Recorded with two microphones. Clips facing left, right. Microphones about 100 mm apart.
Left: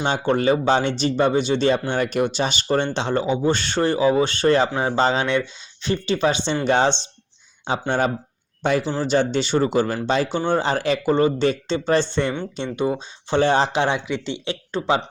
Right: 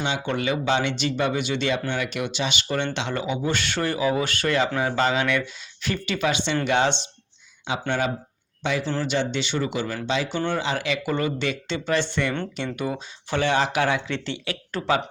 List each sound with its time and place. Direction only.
0.0 s speech: 40° left (ahead or behind)
10.3 s speech: 30° left (ahead or behind)
10.6 s speech: 40° left (ahead or behind); by 15.0 s 20° left (ahead or behind)